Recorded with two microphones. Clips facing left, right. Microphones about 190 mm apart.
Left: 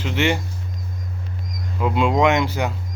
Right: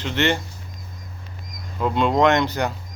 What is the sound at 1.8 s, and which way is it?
Speech, 5° left (ahead or behind).